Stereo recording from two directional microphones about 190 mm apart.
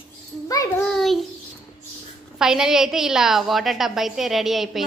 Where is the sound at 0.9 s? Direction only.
Centre (ahead or behind).